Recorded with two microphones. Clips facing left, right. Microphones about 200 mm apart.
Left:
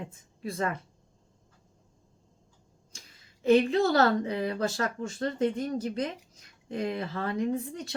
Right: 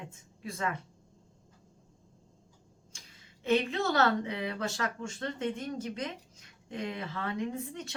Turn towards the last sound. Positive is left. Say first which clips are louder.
# left 6 dB
turn(degrees=35)  # may be behind; listen again after turning